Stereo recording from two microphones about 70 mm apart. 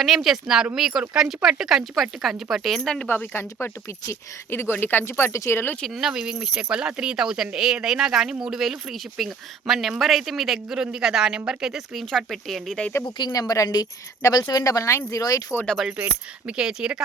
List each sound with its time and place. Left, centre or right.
0.0 s speech: centre
3.1 s speech: left
5.9 s speech: centre
13.1 s a woman's voice: left
15.2 s speech: left
15.8 s speech: centre
16.5 s speech: centre